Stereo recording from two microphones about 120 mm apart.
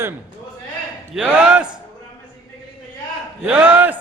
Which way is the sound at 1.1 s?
10° right (ahead or behind).